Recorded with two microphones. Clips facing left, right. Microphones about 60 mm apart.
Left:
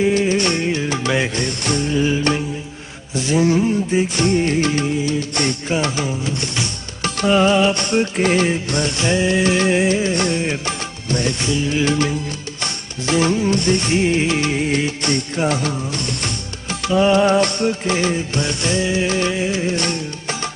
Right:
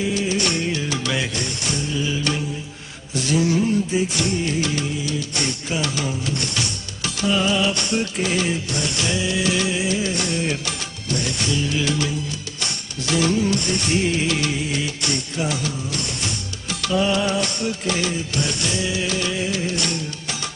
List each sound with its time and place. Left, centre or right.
0.0 s music: left
3.2 s a sound: left
3.9 s music: left
6.2 s a sound: left
7.0 s music: left
14.6 s music: left
16.8 s music: left